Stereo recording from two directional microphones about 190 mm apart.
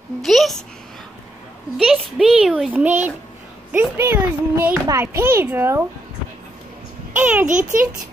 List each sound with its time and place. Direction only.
0.2 s a woman's voice: centre (ahead or behind)
1.8 s a child's voice: centre (ahead or behind)
7.2 s a child's voice: 10° right (ahead or behind)
7.4 s a child's voice: 45° right (ahead or behind)